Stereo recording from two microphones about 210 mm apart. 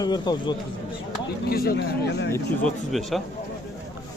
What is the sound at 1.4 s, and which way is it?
Speech, 45° left (ahead or behind).